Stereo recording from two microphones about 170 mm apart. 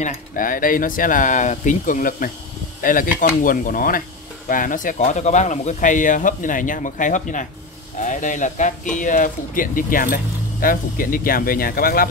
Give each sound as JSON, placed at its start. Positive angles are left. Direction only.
{"t": 0.0, "sound": "speech", "side_deg": 55}